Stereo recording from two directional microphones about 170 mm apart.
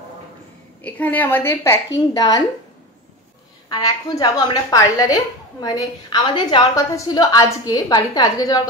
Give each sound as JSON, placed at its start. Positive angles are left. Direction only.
{"t": 0.8, "sound": "a woman's voice", "side_deg": 10}
{"t": 3.6, "sound": "a woman's voice", "side_deg": 20}